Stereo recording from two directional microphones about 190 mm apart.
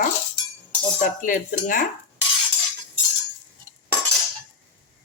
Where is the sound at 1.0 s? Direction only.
45° left (ahead or behind).